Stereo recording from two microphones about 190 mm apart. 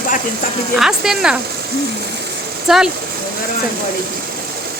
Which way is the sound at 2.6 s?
Centre (ahead or behind).